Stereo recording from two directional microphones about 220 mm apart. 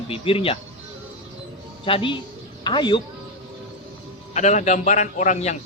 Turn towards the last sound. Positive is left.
turn(degrees=35)  # may be behind; listen again after turning